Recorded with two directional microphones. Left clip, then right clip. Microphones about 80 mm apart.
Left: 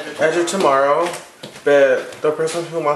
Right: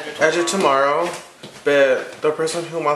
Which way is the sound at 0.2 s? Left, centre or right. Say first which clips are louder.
Left 1 dB; centre.